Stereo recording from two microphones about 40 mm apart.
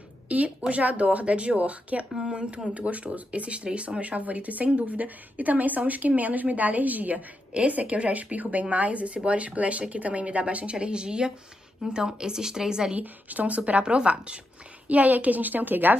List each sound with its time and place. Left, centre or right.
0.3 s a woman's voice: right
2.1 s a woman's voice: right
7.5 s a woman's voice: right; by 12.9 s centre
12.9 s a woman's voice: right
13.8 s speech: right
14.9 s a woman's voice: right